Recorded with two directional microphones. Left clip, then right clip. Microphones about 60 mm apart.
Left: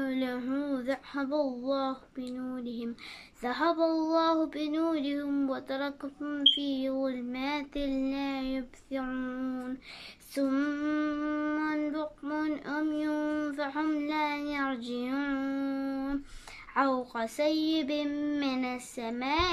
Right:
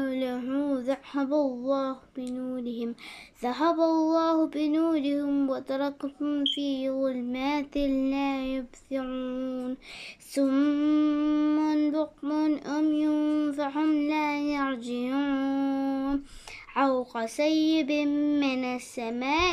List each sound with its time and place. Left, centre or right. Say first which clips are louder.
0.0 s speech: right 3 dB; right
3.4 s child singing: right 3 dB; right
10.3 s a sound: right 5 dB; right